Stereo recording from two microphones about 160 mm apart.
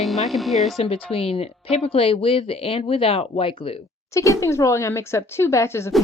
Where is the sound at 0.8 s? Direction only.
40° left (ahead or behind).